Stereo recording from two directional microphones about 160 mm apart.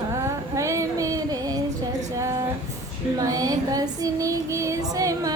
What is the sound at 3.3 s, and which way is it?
Child singing, 20° right (ahead or behind).